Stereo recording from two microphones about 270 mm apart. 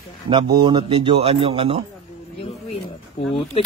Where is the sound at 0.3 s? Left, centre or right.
Centre.